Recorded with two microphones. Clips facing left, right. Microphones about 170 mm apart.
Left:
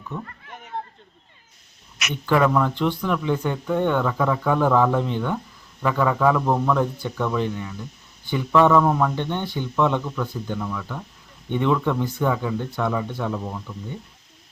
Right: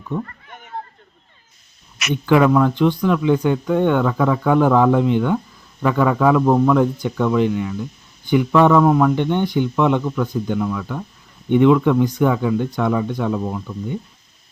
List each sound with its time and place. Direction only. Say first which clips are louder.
2.2 s speech: right 5 dB; 15° right (ahead or behind)